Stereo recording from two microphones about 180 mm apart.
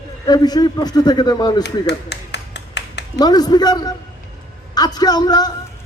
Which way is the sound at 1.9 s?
70° left (ahead or behind).